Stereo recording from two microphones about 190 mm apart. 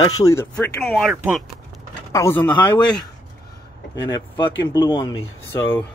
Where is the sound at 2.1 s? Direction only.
15° left (ahead or behind).